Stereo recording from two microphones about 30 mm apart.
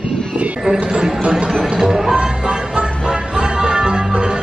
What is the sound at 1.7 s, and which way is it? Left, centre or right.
Music, right.